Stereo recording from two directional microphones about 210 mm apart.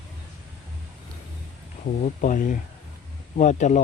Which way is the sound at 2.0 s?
40° left (ahead or behind).